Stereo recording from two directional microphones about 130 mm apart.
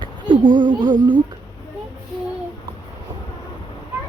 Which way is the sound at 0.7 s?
35° right (ahead or behind).